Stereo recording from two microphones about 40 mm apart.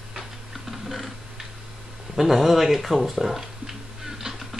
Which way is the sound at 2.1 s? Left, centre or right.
Centre.